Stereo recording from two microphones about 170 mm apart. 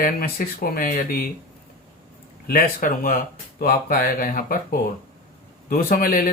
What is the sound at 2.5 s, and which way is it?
Speech, 55° left (ahead or behind).